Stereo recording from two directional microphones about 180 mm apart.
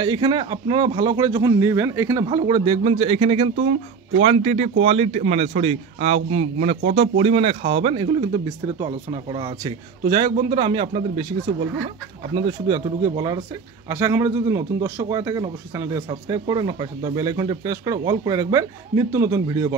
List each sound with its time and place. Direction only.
0.0 s a man's voice: 25° right (ahead or behind)
12.4 s a man's voice: 25° right (ahead or behind)